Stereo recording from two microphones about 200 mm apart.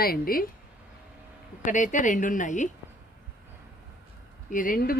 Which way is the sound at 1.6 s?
40° left (ahead or behind).